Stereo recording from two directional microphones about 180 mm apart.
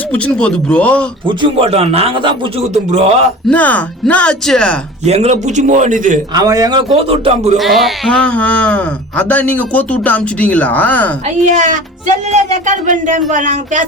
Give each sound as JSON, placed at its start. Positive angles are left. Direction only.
{"t": 0.1, "sound": "speech", "side_deg": 5}
{"t": 1.3, "sound": "speech", "side_deg": -30}
{"t": 3.4, "sound": "speech", "side_deg": 10}
{"t": 5.0, "sound": "speech", "side_deg": -35}
{"t": 6.3, "sound": "a man's voice", "side_deg": -20}
{"t": 7.1, "sound": "speech", "side_deg": -30}
{"t": 7.5, "sound": "speech", "side_deg": 0}
{"t": 11.4, "sound": "speech", "side_deg": -45}